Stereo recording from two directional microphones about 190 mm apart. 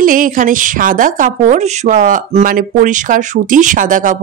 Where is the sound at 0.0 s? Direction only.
45° right (ahead or behind).